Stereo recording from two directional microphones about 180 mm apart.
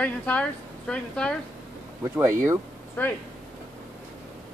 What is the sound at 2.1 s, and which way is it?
Speech, 15° right (ahead or behind).